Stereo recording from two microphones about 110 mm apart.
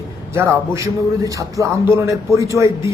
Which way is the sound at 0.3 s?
25° right (ahead or behind).